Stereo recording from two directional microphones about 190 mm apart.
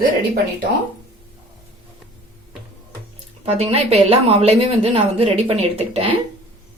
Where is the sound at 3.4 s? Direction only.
30° right (ahead or behind).